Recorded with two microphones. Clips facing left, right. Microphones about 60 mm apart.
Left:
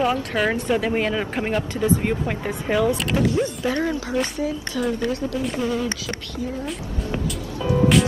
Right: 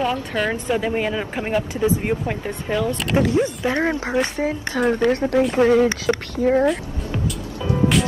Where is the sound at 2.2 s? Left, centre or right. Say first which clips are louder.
Even; centre.